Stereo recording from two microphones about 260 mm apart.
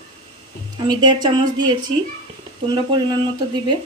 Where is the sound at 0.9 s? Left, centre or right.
Centre.